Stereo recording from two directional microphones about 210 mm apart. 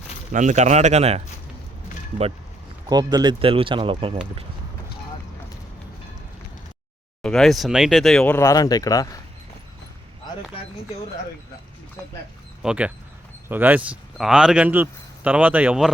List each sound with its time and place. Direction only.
0.3 s speech: 35° right (ahead or behind)
2.9 s speech: 20° right (ahead or behind)
7.2 s speech: 5° left (ahead or behind)
12.6 s speech: 5° right (ahead or behind)